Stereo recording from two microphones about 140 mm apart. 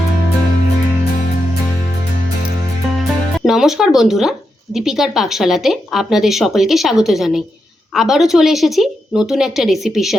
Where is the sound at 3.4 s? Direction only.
Centre (ahead or behind).